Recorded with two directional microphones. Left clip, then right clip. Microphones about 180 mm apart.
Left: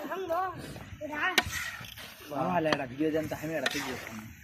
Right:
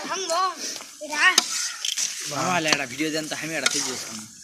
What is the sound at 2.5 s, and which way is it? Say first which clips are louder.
Speech: right 6 dB; 30° left (ahead or behind).